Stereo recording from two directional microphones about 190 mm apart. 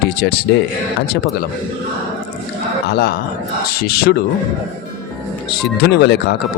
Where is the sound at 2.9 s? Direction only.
55° left (ahead or behind).